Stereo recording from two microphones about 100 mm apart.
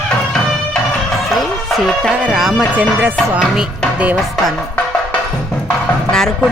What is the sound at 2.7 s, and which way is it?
Speech, 15° right (ahead or behind).